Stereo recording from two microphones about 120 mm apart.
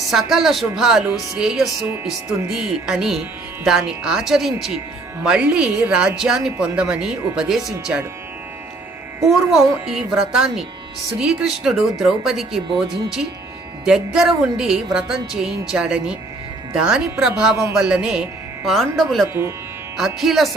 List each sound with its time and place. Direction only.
0.1 s speech: 5° right (ahead or behind)
9.2 s speech: centre (ahead or behind)
19.3 s speech: 20° right (ahead or behind)
20.0 s speech: 5° right (ahead or behind)